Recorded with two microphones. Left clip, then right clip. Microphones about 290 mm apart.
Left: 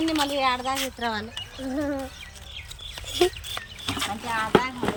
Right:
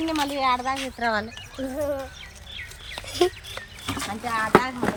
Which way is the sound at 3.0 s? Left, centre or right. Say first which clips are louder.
Even; centre.